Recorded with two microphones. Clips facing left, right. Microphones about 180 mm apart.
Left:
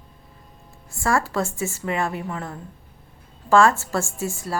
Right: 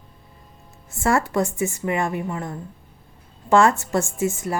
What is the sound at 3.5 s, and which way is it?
A woman's voice, 20° right (ahead or behind).